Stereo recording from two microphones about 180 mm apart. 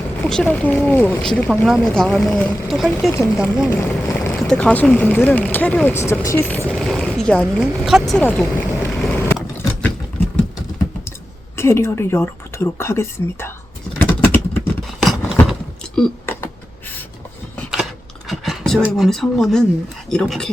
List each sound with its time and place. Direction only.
0.3 s speech: 5° left (ahead or behind)
3.1 s speech: 15° left (ahead or behind)
6.7 s speech: centre (ahead or behind)
11.5 s speech: 15° left (ahead or behind)
14.0 s a sound: 10° left (ahead or behind)
15.0 s a sound: centre (ahead or behind)
16.0 s a sound: 10° left (ahead or behind)
18.3 s computer keyboard: centre (ahead or behind)
18.8 s speech: centre (ahead or behind)